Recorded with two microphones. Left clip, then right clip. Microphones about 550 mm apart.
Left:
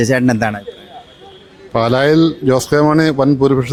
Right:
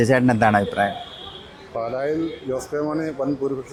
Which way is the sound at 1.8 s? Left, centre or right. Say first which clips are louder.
Left 12 dB; left.